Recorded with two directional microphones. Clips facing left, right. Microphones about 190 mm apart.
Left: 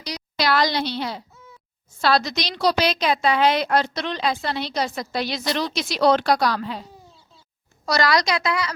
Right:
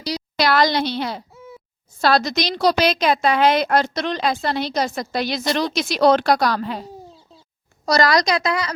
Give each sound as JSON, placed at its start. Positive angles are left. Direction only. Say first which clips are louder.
{"t": 0.3, "sound": "a woman's voice", "louder": "right 3 dB", "side_deg": -50}
{"t": 7.9, "sound": "a woman's voice", "louder": "right 3 dB", "side_deg": -40}